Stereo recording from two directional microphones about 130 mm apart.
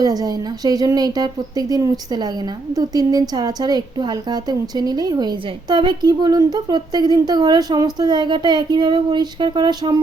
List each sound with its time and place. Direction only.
0.0 s a woman's voice: 30° right (ahead or behind)